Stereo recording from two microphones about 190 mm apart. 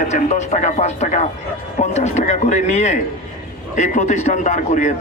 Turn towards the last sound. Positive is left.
turn(degrees=40)  # may be behind; listen again after turning